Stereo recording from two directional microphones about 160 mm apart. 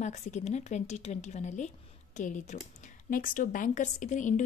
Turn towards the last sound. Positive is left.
turn(degrees=50)  # may be behind; listen again after turning